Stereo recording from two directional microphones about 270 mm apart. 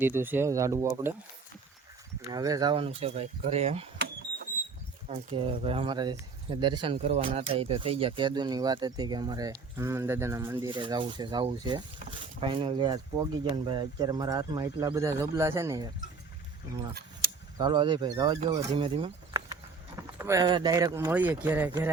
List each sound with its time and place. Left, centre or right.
0.0 s speech: centre
2.3 s speech: centre
5.0 s speech: right
17.6 s speech: centre